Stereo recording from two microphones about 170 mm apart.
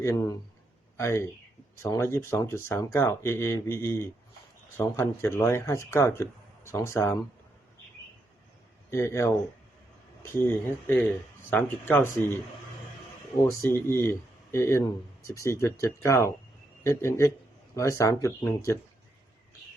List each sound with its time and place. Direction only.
0.0 s speech: 15° left (ahead or behind)
8.9 s speech: 15° left (ahead or behind)
10.4 s speech: 10° left (ahead or behind)
13.4 s speech: 15° left (ahead or behind)